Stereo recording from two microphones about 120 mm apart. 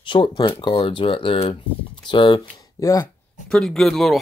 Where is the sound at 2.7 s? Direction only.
25° left (ahead or behind).